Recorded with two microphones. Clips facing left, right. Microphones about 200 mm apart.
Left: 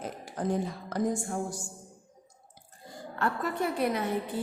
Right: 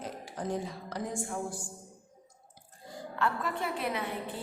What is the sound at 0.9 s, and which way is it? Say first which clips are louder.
Speech: left 6 dB; 45° left (ahead or behind).